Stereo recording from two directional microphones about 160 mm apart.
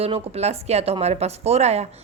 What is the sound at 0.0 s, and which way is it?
Speech, 40° right (ahead or behind).